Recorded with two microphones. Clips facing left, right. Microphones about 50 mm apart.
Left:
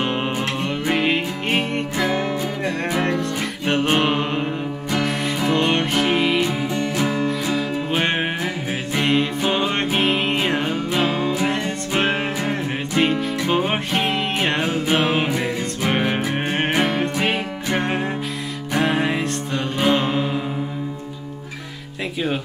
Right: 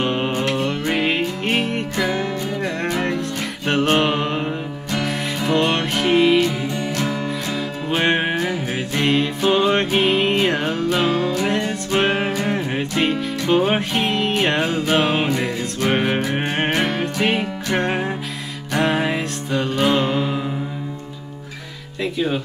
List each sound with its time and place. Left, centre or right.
0.0 s music: centre
2.1 s music: centre
2.8 s music: centre